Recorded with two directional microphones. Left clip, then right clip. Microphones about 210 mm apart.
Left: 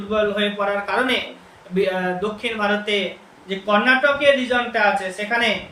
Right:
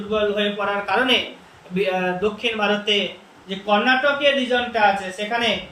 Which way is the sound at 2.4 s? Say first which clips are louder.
Even; centre (ahead or behind).